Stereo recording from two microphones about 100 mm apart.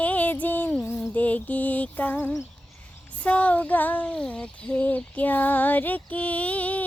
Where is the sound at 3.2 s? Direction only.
15° left (ahead or behind).